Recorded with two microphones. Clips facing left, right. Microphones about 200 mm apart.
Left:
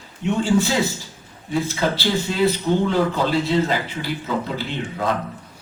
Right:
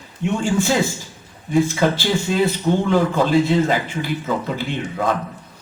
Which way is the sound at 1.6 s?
50° right (ahead or behind).